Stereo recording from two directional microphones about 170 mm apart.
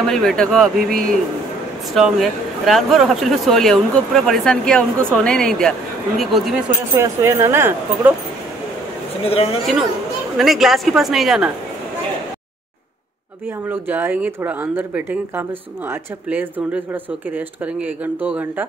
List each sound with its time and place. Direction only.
0.0 s a man's voice: centre (ahead or behind)
0.7 s speech: 60° right (ahead or behind)
2.0 s a man's voice: centre (ahead or behind)
7.0 s speech: 15° right (ahead or behind)
9.2 s a man's voice: 35° left (ahead or behind)
10.3 s a man's voice: centre (ahead or behind)
13.7 s speech: 10° right (ahead or behind)